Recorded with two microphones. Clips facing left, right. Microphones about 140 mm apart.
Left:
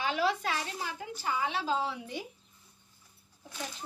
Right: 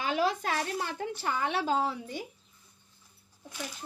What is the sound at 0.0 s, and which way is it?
Speech, 45° right (ahead or behind).